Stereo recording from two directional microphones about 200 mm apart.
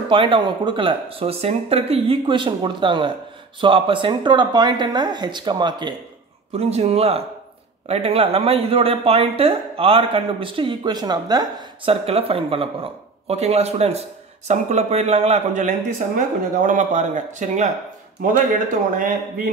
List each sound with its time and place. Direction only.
0.1 s a man's voice: 25° right (ahead or behind); by 19.5 s 45° right (ahead or behind)